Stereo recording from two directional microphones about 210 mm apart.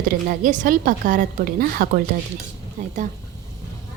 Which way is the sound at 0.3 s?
40° right (ahead or behind).